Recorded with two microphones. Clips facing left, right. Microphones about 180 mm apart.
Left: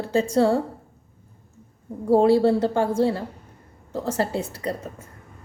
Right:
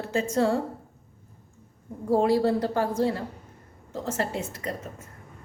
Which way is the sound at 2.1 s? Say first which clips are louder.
Left 5 dB; 30° left (ahead or behind).